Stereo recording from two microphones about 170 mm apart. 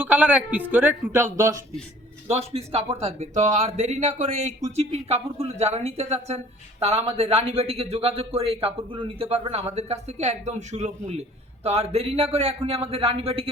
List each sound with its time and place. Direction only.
0.0 s speech: 10° right (ahead or behind)
2.3 s speech: 35° right (ahead or behind)